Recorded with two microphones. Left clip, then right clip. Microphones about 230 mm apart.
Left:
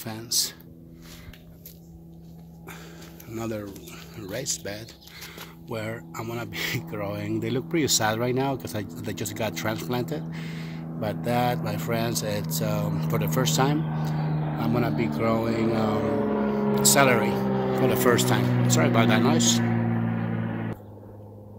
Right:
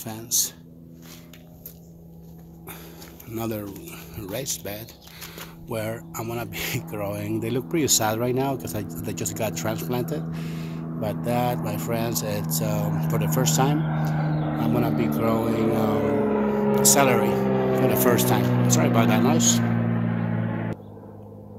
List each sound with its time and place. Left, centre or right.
0.0 s speech: centre
3.3 s speech: centre
13.7 s speech: centre
17.3 s a sound: centre
17.8 s speech: centre
19.8 s vehicle: right